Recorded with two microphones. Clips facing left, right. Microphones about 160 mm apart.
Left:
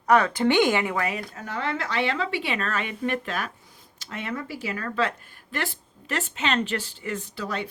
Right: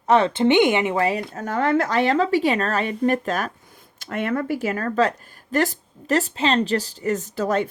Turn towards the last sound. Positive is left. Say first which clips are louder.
# right 9 dB
turn(degrees=-45)  # may be behind; listen again after turning